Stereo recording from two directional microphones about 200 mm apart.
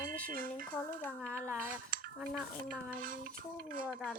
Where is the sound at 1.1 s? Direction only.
5° left (ahead or behind).